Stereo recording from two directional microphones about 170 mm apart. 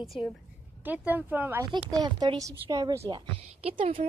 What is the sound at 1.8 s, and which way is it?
Speech, centre (ahead or behind).